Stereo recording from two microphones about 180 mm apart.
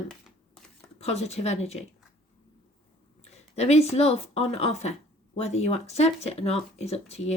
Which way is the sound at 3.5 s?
35° left (ahead or behind).